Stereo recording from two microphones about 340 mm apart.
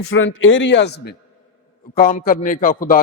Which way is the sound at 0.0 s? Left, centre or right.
Left.